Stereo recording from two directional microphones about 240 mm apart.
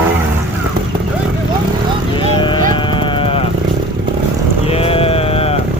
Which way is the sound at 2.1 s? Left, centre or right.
Centre.